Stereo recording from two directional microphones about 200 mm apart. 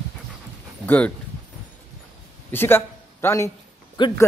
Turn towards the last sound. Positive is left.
turn(degrees=25)  # may be behind; listen again after turning